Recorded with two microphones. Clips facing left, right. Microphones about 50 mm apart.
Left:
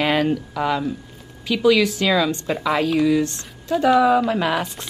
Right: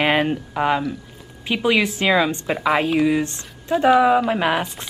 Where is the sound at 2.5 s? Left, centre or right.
Centre.